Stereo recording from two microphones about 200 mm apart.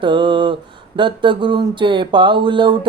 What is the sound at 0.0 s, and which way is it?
Mantra, 25° right (ahead or behind).